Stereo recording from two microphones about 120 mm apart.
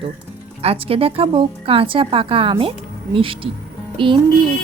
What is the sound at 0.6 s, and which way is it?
Speech, 55° right (ahead or behind).